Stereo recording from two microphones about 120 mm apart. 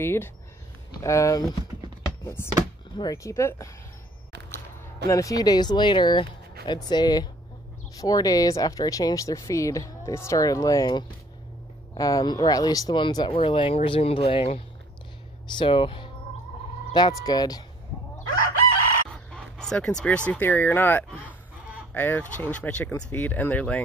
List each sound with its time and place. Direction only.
0.0 s speech: 20° left (ahead or behind)
5.0 s speech: 30° left (ahead or behind); by 14.5 s 55° left (ahead or behind)
15.4 s speech: 40° left (ahead or behind)
16.9 s speech: 35° left (ahead or behind)
19.1 s fowl: 5° left (ahead or behind)
20.2 s speech: 15° left (ahead or behind)